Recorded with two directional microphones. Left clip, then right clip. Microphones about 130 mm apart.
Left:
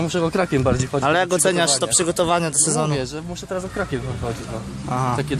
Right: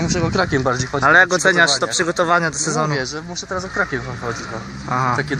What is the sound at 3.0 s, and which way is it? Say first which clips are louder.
Speech: right 3 dB; 50° left (ahead or behind).